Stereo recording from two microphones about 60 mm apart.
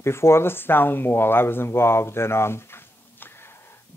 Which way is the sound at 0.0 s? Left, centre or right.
Left.